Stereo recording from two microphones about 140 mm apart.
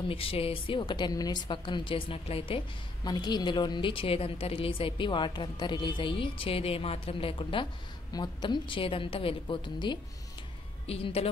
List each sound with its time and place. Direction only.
0.1 s a woman's voice: 40° left (ahead or behind)
3.0 s a woman's voice: 30° left (ahead or behind)